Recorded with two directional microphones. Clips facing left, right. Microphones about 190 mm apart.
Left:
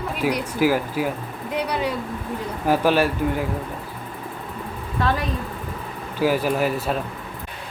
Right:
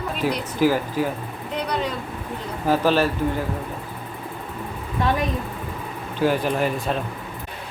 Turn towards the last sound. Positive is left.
turn(degrees=5)  # may be behind; listen again after turning